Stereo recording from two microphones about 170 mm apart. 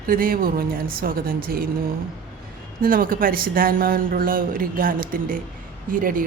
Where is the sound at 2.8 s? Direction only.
55° right (ahead or behind).